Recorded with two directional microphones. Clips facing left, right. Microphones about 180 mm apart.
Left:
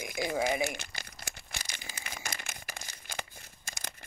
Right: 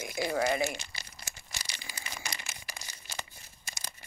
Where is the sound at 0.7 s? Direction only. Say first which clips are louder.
Left 1 dB; 50° left (ahead or behind).